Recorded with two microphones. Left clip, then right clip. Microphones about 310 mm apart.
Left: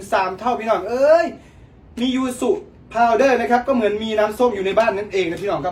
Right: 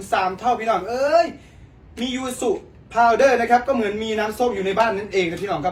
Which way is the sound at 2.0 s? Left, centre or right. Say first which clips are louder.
Left 3 dB; centre.